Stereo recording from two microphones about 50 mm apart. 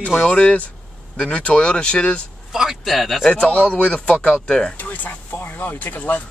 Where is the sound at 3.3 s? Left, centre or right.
Left.